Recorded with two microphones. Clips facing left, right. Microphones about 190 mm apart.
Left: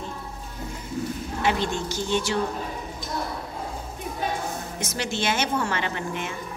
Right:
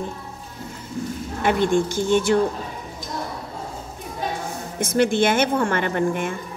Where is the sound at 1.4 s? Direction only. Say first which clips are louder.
Right 7 dB; 50° right (ahead or behind).